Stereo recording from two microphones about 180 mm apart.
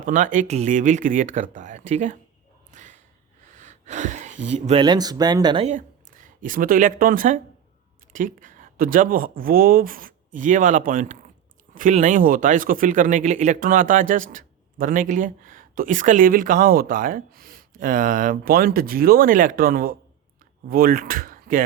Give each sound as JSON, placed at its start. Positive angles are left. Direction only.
{"t": 0.0, "sound": "speech", "side_deg": -45}
{"t": 2.7, "sound": "whip", "side_deg": -45}
{"t": 3.4, "sound": "a sound", "side_deg": -40}
{"t": 4.8, "sound": "speech", "side_deg": -25}
{"t": 5.6, "sound": "speech", "side_deg": -45}